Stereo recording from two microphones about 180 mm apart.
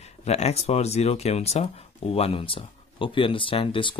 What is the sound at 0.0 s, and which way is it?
Speech, 35° left (ahead or behind).